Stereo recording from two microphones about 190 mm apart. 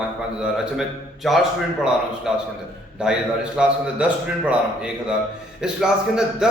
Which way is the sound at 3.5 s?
5° right (ahead or behind).